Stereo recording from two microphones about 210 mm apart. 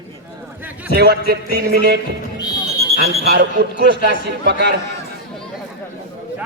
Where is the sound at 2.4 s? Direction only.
20° left (ahead or behind).